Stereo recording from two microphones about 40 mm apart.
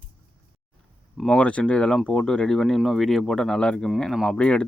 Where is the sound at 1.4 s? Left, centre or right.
Left; by 3.6 s centre.